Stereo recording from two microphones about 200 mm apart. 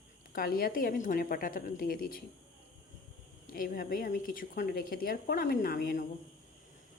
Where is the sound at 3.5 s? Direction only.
45° left (ahead or behind).